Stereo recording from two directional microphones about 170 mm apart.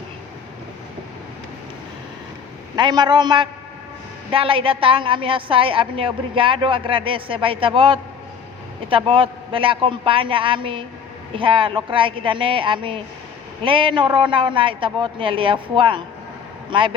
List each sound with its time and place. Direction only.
2.7 s a woman's voice: 25° right (ahead or behind)